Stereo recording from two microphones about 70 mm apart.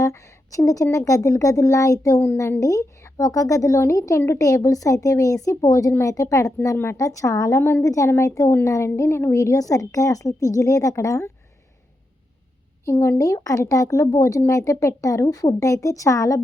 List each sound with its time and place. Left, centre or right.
0.0 s speech: left
2.2 s a woman's voice: left
2.6 s a woman's voice: left
9.4 s speech: left
12.8 s speech: left